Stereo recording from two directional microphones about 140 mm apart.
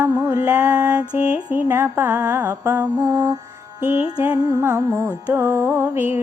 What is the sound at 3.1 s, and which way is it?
Music, 25° right (ahead or behind).